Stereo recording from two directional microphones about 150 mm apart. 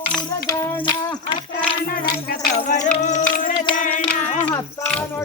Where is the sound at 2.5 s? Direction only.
55° left (ahead or behind).